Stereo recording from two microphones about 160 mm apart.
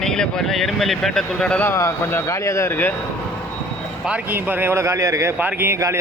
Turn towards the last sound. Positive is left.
turn(degrees=-15)  # may be behind; listen again after turning